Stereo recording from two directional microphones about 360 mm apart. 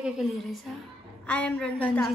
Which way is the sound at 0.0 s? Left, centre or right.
Centre.